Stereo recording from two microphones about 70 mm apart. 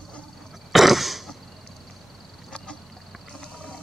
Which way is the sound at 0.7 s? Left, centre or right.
Centre.